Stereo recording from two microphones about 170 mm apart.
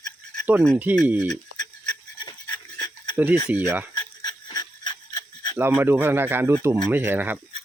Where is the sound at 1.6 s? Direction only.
25° left (ahead or behind).